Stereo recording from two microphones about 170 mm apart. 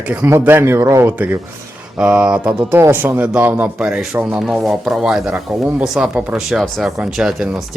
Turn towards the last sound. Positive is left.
turn(degrees=-5)  # may be behind; listen again after turning